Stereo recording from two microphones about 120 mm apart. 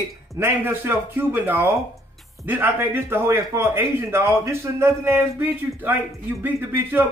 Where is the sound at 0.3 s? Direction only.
20° right (ahead or behind).